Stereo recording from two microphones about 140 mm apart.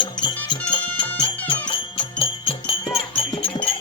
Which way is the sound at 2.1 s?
40° left (ahead or behind).